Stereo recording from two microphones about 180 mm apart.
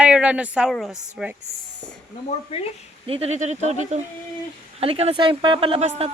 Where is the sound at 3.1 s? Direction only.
35° right (ahead or behind).